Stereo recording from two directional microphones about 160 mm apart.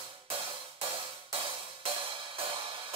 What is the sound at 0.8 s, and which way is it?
Music, 35° right (ahead or behind).